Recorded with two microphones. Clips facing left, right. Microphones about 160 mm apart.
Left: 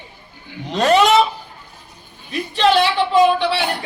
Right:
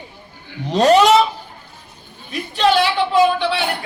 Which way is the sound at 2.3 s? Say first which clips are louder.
Left 1 dB; centre (ahead or behind).